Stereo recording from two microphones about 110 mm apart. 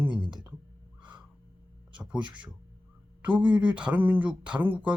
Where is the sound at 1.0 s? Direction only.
15° right (ahead or behind).